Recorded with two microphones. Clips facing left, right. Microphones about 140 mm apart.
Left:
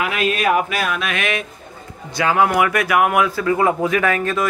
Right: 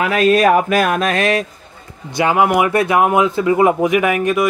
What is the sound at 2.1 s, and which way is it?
A man's voice, 20° right (ahead or behind).